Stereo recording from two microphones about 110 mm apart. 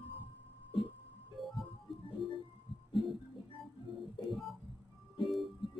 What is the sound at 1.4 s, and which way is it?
Music, centre (ahead or behind).